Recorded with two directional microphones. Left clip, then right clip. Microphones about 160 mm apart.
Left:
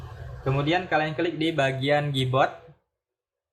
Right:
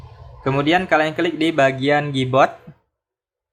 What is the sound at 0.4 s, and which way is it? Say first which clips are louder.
Speech: right 8 dB; 45° right (ahead or behind).